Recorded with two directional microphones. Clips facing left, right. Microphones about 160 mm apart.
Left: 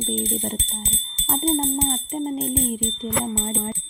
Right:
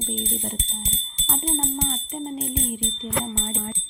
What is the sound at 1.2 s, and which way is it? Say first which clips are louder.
Music: left 6 dB; 45° left (ahead or behind).